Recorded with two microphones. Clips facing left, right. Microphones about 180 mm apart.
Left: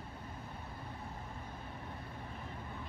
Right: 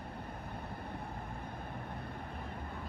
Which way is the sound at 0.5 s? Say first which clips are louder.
Right 4 dB; 60° right (ahead or behind).